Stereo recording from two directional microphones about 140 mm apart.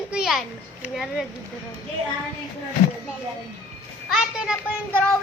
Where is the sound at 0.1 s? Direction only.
Centre (ahead or behind).